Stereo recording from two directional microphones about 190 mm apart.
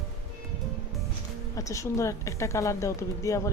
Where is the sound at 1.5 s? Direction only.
15° left (ahead or behind).